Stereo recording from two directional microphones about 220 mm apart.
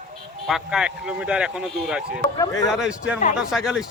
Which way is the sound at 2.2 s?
15° left (ahead or behind).